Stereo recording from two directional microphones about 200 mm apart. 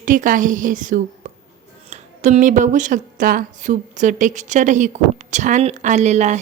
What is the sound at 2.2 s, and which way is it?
A woman's voice, 40° right (ahead or behind).